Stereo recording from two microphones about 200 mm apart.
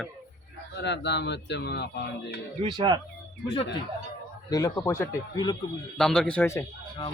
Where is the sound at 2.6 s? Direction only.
25° right (ahead or behind).